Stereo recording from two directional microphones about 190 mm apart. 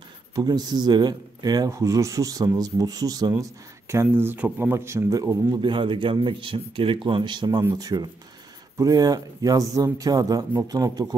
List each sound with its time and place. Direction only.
0.4 s speech: 20° right (ahead or behind)